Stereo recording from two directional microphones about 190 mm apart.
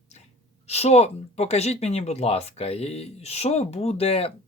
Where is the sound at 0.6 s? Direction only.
35° left (ahead or behind).